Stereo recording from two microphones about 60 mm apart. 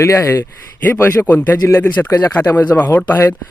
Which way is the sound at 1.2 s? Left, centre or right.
Left.